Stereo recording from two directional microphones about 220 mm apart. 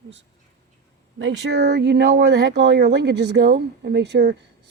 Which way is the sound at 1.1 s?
55° right (ahead or behind).